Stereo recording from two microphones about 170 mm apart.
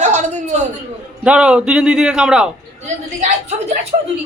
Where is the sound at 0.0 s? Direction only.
45° right (ahead or behind).